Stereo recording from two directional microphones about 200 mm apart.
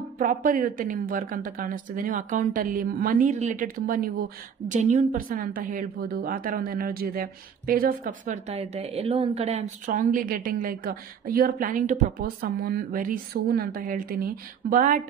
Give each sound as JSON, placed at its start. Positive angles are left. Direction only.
{"t": 0.2, "sound": "a woman's voice", "side_deg": -40}